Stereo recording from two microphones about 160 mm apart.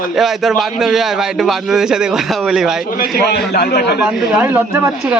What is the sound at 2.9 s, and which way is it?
A man's voice, 70° left (ahead or behind).